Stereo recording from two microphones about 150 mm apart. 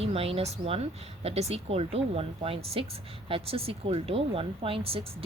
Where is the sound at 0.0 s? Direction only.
40° right (ahead or behind).